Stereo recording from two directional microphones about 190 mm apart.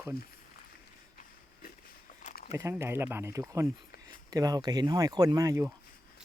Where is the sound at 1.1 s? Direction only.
45° left (ahead or behind).